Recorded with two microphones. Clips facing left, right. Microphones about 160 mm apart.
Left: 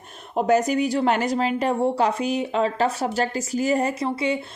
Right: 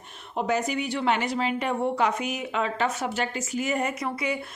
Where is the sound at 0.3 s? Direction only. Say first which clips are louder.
Left 7 dB; 45° left (ahead or behind).